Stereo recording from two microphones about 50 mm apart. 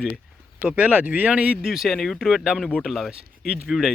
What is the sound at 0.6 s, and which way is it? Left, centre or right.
Speech, right.